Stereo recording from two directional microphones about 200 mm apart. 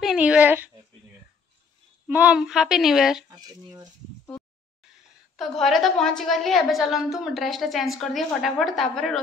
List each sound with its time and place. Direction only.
0.0 s a sound: 5° right (ahead or behind)
2.0 s a woman's voice: 5° right (ahead or behind)
3.3 s speech: 20° right (ahead or behind)
5.3 s a woman's voice: centre (ahead or behind)